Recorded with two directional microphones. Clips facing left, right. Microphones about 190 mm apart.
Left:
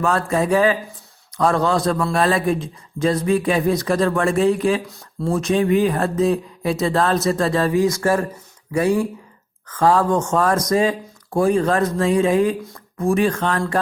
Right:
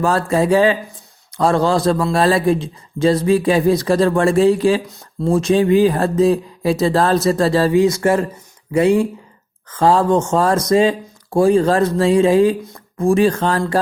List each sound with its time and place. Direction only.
0.0 s speech: 35° right (ahead or behind)